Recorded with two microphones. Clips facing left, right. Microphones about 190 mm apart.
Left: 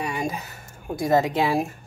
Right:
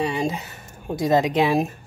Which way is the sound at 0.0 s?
25° right (ahead or behind).